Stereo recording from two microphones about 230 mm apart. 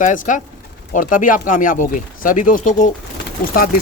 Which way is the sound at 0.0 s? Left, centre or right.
Left.